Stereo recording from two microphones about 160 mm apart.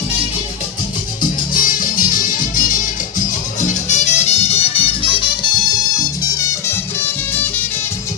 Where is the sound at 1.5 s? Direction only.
60° left (ahead or behind); by 4.6 s 40° left (ahead or behind).